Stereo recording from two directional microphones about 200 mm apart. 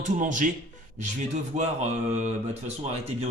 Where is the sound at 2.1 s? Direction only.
35° right (ahead or behind).